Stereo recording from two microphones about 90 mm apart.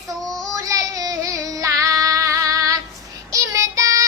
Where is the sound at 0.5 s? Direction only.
40° right (ahead or behind).